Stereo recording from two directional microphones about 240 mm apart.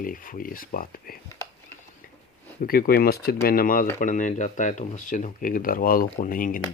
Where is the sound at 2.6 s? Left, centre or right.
Left.